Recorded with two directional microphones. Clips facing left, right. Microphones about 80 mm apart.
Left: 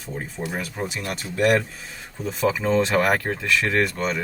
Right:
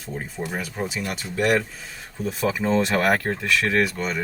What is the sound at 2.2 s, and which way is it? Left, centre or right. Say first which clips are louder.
Speech: left 1 dB; centre.